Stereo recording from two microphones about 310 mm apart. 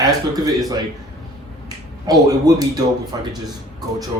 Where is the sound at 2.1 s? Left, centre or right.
Centre.